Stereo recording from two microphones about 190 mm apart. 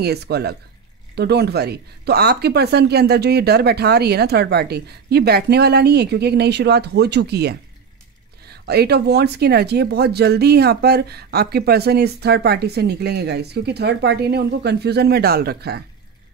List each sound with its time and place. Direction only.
0.0 s speech: 60° right (ahead or behind)